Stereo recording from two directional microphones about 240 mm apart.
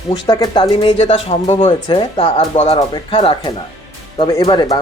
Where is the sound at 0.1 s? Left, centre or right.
Centre.